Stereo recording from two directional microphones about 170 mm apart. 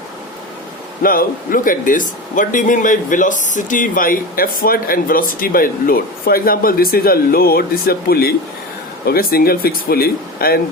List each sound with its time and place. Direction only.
1.0 s a man's voice: 55° left (ahead or behind)